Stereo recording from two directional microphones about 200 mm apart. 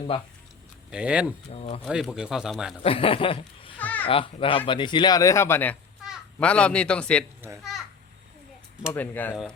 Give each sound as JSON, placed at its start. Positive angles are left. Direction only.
{"t": 0.9, "sound": "speech", "side_deg": -5}
{"t": 1.5, "sound": "speech", "side_deg": 30}
{"t": 1.8, "sound": "speech", "side_deg": 0}
{"t": 2.8, "sound": "speech", "side_deg": 30}
{"t": 3.8, "sound": "babbling", "side_deg": 10}
{"t": 4.0, "sound": "a child's voice", "side_deg": 25}
{"t": 8.9, "sound": "speech", "side_deg": 10}